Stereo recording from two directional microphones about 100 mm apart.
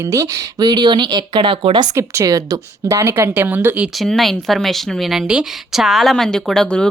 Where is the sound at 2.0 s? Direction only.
30° right (ahead or behind).